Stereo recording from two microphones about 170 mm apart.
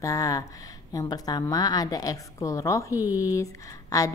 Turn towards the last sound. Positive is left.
turn(degrees=20)  # may be behind; listen again after turning